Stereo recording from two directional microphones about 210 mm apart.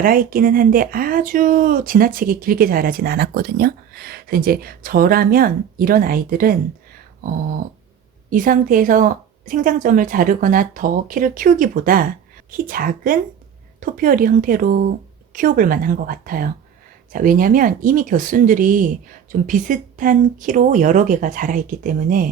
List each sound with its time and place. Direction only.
0.0 s speech: 45° right (ahead or behind)
8.3 s a woman's voice: 40° right (ahead or behind)